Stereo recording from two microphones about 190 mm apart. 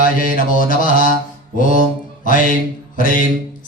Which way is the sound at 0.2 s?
45° left (ahead or behind).